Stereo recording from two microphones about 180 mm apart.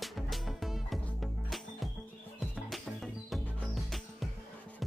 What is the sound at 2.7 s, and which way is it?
Music, centre (ahead or behind).